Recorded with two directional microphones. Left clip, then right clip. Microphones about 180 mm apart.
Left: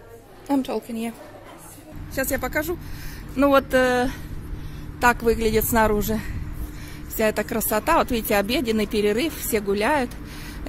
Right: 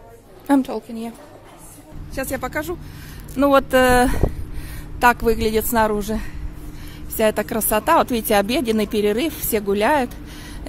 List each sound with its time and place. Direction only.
0.5 s speech: 5° right (ahead or behind)
2.1 s a woman's voice: 5° left (ahead or behind)
3.3 s speech: 10° right (ahead or behind)
5.0 s a woman's voice: 5° right (ahead or behind)